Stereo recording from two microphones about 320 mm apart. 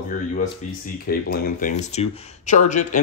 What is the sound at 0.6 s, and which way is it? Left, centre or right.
Speech, left.